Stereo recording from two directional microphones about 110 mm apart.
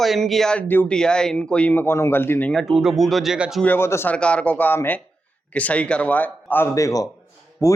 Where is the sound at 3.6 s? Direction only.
20° left (ahead or behind).